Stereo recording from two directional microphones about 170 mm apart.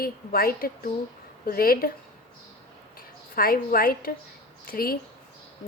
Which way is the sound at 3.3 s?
60° left (ahead or behind).